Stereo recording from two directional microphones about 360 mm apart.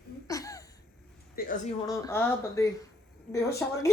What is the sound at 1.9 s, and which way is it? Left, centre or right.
A woman's voice, centre.